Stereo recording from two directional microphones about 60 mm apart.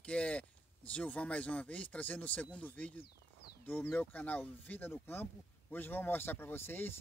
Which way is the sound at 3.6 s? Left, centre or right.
Left.